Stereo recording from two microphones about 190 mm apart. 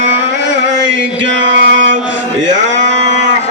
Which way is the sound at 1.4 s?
70° right (ahead or behind).